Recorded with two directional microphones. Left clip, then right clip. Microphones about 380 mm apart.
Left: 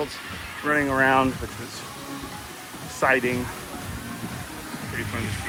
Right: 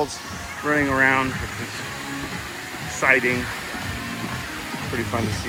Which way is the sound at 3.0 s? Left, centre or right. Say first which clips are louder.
Right 3 dB; centre.